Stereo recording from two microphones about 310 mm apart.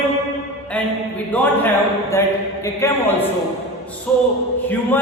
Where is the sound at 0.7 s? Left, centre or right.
Centre.